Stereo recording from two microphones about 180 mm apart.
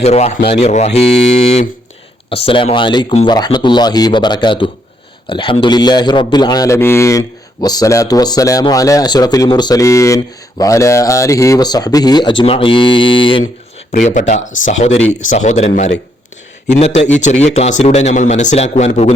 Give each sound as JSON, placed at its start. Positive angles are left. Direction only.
{"t": 0.0, "sound": "a man's voice", "side_deg": 35}
{"t": 13.9, "sound": "a man's voice", "side_deg": 45}
{"t": 17.1, "sound": "a man's voice", "side_deg": 40}